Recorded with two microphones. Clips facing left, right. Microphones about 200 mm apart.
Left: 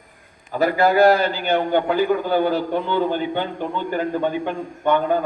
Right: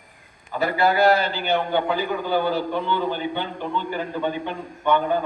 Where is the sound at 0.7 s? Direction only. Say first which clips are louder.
Left 3 dB; 45° left (ahead or behind).